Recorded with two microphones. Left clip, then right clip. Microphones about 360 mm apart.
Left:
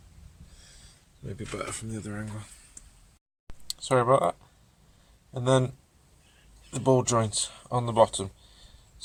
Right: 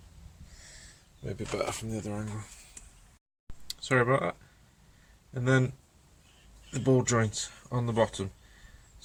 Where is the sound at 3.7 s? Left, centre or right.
Centre.